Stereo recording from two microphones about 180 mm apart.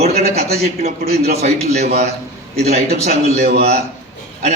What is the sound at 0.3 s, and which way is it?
A man's voice, 35° right (ahead or behind).